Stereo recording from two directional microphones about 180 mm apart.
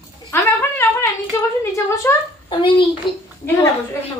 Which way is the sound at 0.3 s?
10° left (ahead or behind).